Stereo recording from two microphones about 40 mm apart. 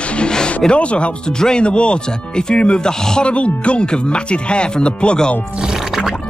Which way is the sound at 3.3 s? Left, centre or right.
Left.